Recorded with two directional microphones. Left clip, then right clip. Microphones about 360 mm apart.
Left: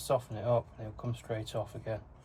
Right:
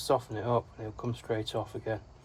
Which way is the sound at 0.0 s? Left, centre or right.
Right.